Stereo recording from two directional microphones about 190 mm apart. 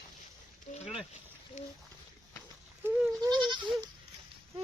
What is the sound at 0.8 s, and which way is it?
Speech, 30° left (ahead or behind).